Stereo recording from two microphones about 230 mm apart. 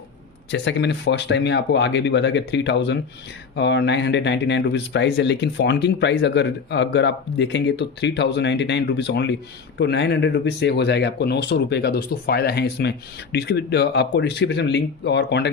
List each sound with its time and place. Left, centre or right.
0.5 s speech: left